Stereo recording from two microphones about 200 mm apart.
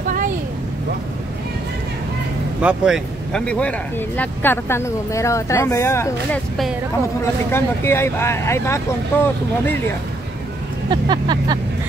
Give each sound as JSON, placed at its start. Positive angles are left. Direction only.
{"t": 2.6, "sound": "speech", "side_deg": -5}
{"t": 7.5, "sound": "speech", "side_deg": 10}
{"t": 10.9, "sound": "speech", "side_deg": -20}